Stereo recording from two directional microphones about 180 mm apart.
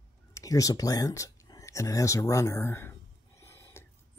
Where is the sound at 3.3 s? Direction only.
15° left (ahead or behind).